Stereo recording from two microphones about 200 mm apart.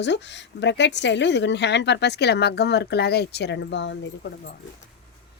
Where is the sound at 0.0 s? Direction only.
60° left (ahead or behind).